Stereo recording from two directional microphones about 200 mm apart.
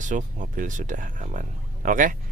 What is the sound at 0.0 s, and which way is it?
Speech, 40° right (ahead or behind).